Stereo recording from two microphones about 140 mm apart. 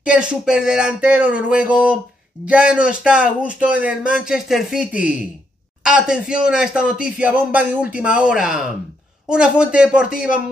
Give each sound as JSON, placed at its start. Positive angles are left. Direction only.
{"t": 0.0, "sound": "a man's voice", "side_deg": -10}